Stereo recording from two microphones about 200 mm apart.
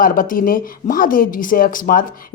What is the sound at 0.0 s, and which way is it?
A woman's voice, 45° left (ahead or behind).